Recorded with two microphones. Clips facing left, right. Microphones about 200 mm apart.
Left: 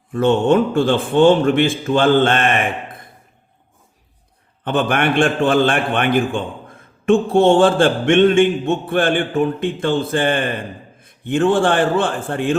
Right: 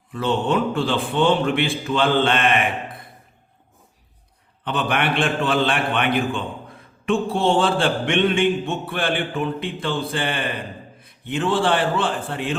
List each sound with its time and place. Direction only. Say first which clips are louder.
0.1 s a man's voice: left 7 dB; 50° left (ahead or behind)
4.6 s a man's voice: left 5 dB; 45° left (ahead or behind)